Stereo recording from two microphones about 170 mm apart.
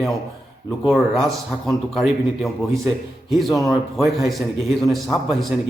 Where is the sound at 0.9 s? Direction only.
Centre (ahead or behind).